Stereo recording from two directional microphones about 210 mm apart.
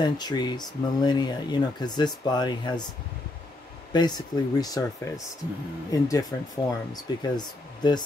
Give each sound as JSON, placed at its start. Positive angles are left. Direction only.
{"t": 0.0, "sound": "speech", "side_deg": 20}
{"t": 3.9, "sound": "speech", "side_deg": 20}